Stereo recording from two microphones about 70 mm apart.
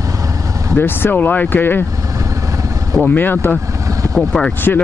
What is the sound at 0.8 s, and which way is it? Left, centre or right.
Speech, left.